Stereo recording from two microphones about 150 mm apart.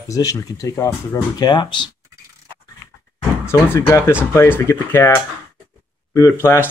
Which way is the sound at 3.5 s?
20° left (ahead or behind).